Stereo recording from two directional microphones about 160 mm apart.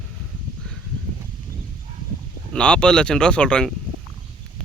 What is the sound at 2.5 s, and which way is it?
Speech, 5° left (ahead or behind).